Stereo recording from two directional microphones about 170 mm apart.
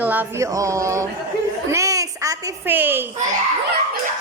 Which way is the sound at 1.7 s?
20° right (ahead or behind).